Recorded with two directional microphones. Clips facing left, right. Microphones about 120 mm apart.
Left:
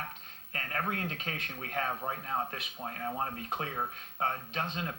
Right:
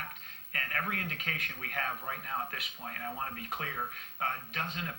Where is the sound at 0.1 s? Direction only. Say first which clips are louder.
Left 1 dB; 30° left (ahead or behind).